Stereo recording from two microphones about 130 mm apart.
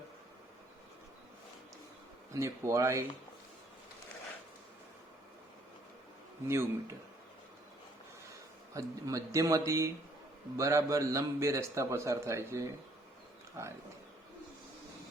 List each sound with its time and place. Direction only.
2.3 s a man's voice: 25° right (ahead or behind)
6.5 s a man's voice: 20° right (ahead or behind)
8.3 s a man's voice: 25° right (ahead or behind)